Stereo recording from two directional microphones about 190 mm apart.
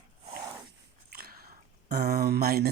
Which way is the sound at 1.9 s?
55° right (ahead or behind).